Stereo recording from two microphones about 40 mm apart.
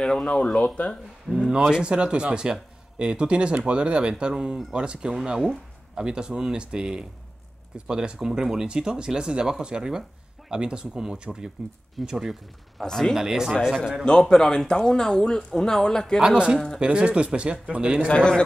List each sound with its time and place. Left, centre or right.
0.0 s a man's voice: centre
1.3 s speech: centre
1.7 s speech: right
5.4 s a sound: centre
6.0 s speech: centre
8.2 s speech: centre
12.1 s speech: centre
12.8 s speech: centre
13.1 s speech: centre
14.0 s speech: centre
16.2 s speech: right
16.5 s speech: centre
16.8 s speech: right
18.0 s a man's voice: left